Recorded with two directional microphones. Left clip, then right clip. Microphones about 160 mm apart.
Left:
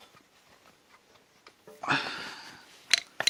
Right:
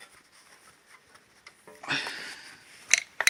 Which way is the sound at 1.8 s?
45° left (ahead or behind).